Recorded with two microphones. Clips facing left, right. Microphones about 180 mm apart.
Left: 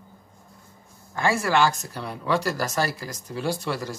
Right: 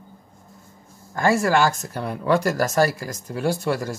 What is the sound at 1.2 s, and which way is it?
Speech, 45° right (ahead or behind).